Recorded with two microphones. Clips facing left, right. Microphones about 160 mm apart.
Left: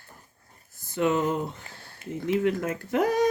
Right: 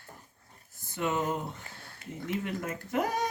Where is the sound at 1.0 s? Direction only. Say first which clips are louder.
Left 7 dB; 90° left.